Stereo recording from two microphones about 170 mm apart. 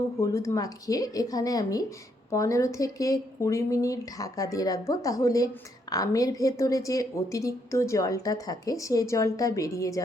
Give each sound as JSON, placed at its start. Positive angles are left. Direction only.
{"t": 0.2, "sound": "a woman's voice", "side_deg": 20}